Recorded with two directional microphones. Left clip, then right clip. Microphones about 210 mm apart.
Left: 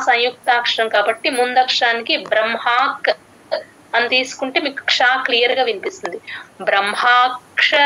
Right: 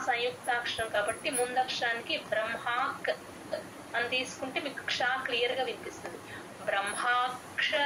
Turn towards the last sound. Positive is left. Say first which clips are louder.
# left 15 dB
turn(degrees=45)  # may be behind; listen again after turning